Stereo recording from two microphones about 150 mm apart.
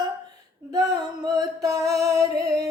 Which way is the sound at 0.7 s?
25° right (ahead or behind).